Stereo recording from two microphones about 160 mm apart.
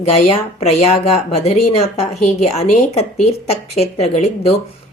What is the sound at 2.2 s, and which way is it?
A woman's voice, 45° left (ahead or behind).